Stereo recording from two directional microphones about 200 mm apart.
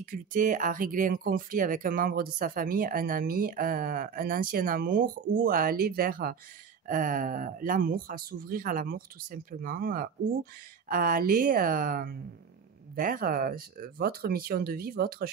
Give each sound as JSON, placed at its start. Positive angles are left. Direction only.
{"t": 0.0, "sound": "speech", "side_deg": -45}